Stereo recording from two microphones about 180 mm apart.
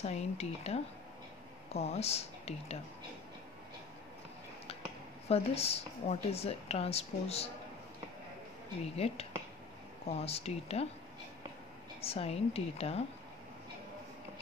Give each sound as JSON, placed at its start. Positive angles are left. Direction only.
{"t": 0.0, "sound": "a woman's voice", "side_deg": 35}
{"t": 5.3, "sound": "a woman's voice", "side_deg": 35}
{"t": 8.9, "sound": "a woman's voice", "side_deg": 35}
{"t": 12.0, "sound": "a woman's voice", "side_deg": 35}